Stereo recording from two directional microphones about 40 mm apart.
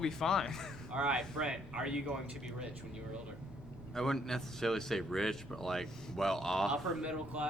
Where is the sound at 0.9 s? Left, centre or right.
Right.